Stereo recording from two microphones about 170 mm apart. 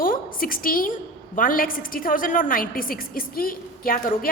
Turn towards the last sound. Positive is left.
turn(degrees=55)  # may be behind; listen again after turning